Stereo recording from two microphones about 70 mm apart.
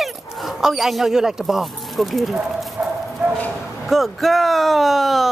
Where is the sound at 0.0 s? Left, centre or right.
Centre.